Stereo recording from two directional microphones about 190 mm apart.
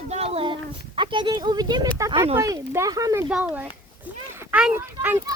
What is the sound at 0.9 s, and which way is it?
Speech, 25° right (ahead or behind).